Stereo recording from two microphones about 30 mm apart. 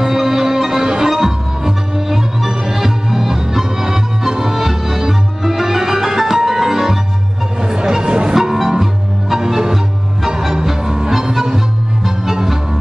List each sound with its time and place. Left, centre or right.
0.0 s music: centre
1.1 s music: centre; by 8.4 s right
8.4 s music: centre